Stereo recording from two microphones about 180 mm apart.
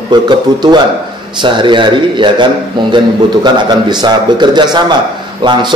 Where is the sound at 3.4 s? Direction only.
25° right (ahead or behind).